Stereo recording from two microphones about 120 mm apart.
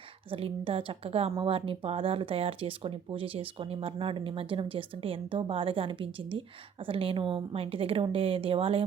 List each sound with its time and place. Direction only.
0.3 s a woman's voice: 50° right (ahead or behind)